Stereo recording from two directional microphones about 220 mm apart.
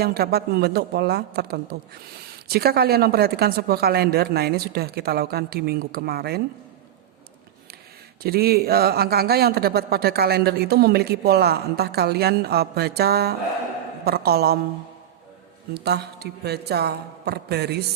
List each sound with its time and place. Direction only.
0.0 s speech: 45° right (ahead or behind)
8.2 s speech: 45° right (ahead or behind)
15.7 s speech: 45° right (ahead or behind)